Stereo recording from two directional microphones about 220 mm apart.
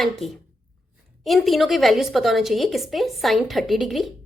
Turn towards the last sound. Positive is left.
turn(degrees=0)  # may be behind; listen again after turning